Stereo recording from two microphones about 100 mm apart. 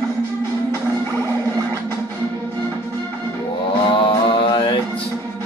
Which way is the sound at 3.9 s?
60° left (ahead or behind).